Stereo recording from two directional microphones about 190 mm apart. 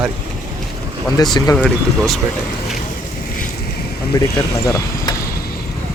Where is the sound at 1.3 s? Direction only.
20° left (ahead or behind).